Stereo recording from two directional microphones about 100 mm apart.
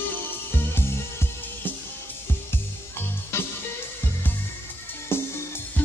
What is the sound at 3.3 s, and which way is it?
Music, 25° left (ahead or behind).